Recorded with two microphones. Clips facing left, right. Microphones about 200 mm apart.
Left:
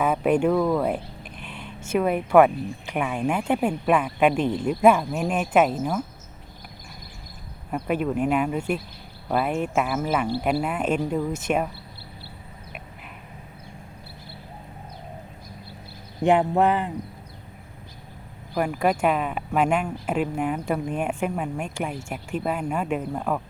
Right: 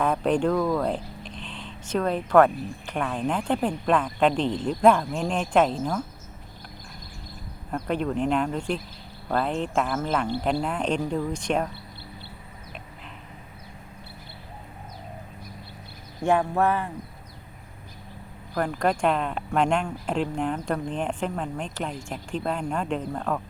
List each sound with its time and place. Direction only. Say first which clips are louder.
0.0 s speech: left 2 dB; 5° left (ahead or behind)
7.7 s speech: left 2 dB; 5° left (ahead or behind)
16.2 s speech: left 3 dB; 20° left (ahead or behind)
18.5 s speech: left 2 dB; 10° left (ahead or behind)